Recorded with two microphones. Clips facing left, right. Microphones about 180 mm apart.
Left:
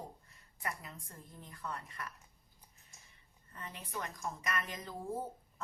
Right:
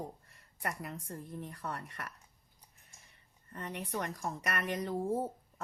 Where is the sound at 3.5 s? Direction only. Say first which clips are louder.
Right 6 dB; 65° right (ahead or behind).